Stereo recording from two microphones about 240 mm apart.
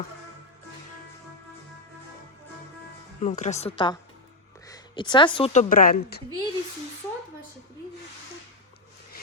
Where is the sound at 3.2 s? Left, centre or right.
Left.